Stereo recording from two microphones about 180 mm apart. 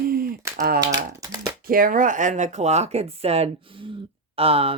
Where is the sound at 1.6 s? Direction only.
50° right (ahead or behind).